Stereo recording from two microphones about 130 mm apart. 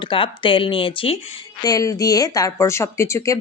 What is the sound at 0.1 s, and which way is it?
Speech, 40° left (ahead or behind).